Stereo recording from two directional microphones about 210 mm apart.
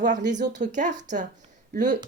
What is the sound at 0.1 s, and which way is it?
Speech, 35° right (ahead or behind).